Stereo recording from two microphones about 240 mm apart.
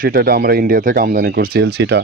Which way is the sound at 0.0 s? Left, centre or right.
Right.